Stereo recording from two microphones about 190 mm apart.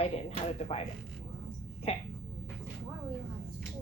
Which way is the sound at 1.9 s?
30° left (ahead or behind).